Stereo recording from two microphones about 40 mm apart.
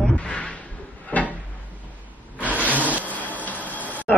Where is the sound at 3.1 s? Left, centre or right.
Left.